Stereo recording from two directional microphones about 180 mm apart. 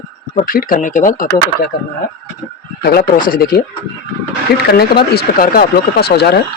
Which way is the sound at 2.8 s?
55° left (ahead or behind).